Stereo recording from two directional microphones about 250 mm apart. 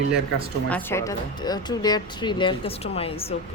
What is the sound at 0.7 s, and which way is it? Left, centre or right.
Speech, centre.